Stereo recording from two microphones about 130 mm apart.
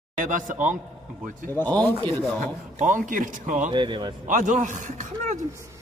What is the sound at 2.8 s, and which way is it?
Speech, 80° right.